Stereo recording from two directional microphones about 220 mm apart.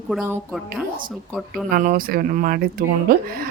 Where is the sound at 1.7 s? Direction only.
40° right (ahead or behind).